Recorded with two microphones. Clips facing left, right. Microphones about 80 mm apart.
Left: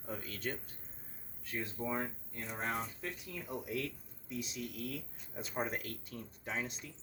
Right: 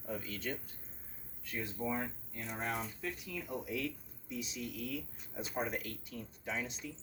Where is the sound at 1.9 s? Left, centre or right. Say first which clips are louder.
Even; left.